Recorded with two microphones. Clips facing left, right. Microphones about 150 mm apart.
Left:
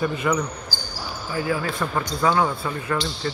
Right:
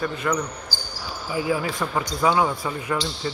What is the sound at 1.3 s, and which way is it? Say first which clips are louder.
Speech: right 1 dB; 15° right (ahead or behind).